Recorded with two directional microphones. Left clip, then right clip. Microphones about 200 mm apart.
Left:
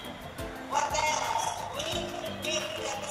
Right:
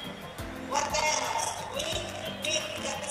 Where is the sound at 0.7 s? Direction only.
25° right (ahead or behind).